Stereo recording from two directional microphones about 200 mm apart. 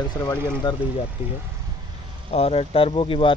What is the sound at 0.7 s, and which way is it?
Speech, 25° left (ahead or behind).